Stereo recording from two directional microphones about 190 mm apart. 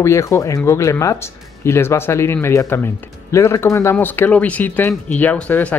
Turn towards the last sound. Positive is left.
turn(degrees=10)  # may be behind; listen again after turning